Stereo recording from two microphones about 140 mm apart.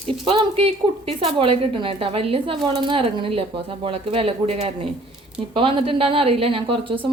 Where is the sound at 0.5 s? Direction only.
45° right (ahead or behind).